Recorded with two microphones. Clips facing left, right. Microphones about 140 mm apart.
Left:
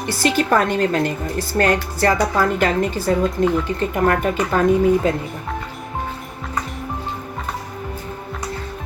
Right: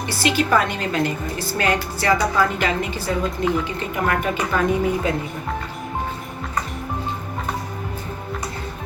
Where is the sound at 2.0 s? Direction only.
45° left (ahead or behind).